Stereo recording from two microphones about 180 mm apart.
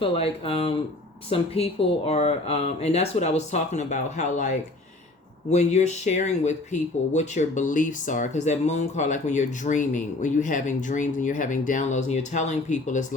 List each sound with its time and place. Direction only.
0.0 s speech: 30° left (ahead or behind)